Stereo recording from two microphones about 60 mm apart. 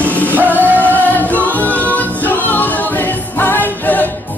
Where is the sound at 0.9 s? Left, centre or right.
Left.